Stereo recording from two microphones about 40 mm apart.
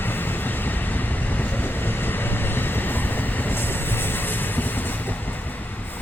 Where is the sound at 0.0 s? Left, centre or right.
Left.